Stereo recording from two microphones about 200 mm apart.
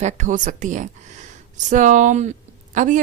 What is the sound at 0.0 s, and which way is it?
Speech, 40° right (ahead or behind).